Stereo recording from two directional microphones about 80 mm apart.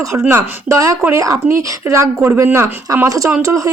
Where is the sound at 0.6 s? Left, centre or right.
Right.